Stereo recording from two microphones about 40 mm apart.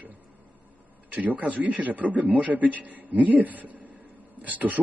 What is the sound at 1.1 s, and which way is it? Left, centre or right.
A man's voice, right.